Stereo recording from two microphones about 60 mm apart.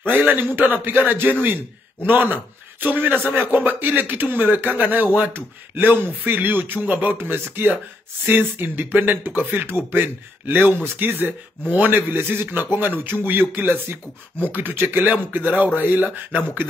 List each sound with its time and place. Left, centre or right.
0.1 s a man's voice: right